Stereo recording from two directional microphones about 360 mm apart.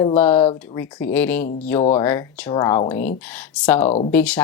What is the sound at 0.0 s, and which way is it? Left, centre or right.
Speech, centre.